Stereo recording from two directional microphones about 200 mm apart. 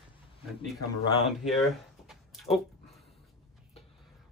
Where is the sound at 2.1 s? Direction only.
Centre (ahead or behind).